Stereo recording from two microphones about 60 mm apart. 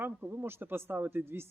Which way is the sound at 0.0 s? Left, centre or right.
Right.